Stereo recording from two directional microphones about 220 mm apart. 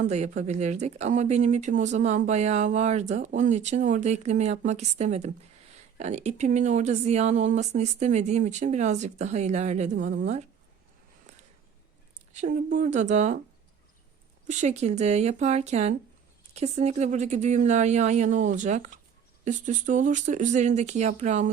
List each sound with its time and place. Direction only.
0.0 s speech: 30° right (ahead or behind)
12.3 s speech: 35° right (ahead or behind)
14.4 s speech: 35° right (ahead or behind)